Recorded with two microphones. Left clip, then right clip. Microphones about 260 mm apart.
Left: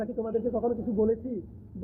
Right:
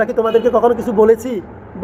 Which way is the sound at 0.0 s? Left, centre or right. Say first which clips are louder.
Right 17 dB; centre.